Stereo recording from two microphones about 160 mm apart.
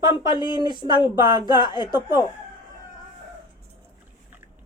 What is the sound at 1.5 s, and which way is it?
Speech, 30° left (ahead or behind).